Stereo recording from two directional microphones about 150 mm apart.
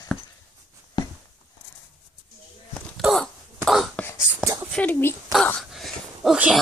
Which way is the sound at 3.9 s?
15° left (ahead or behind).